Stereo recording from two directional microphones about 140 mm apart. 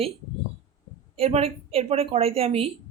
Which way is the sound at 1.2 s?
45° right (ahead or behind).